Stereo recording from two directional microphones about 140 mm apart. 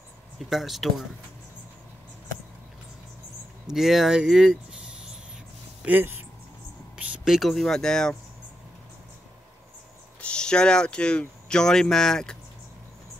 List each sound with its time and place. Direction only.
0.4 s speech: centre (ahead or behind)
3.7 s speech: centre (ahead or behind)
5.8 s a sound: 10° right (ahead or behind)
7.0 s speech: 5° right (ahead or behind)
10.2 s speech: 5° left (ahead or behind)